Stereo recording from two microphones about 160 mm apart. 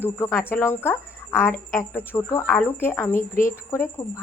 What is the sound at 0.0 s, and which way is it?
Speech, 15° left (ahead or behind).